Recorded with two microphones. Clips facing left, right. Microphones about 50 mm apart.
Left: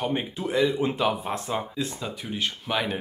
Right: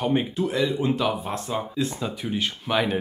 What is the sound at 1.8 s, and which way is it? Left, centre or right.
Speech, centre.